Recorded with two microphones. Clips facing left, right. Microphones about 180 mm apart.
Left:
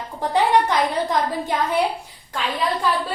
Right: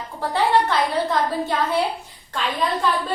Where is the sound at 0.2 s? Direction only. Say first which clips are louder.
Left 1 dB; 15° left (ahead or behind).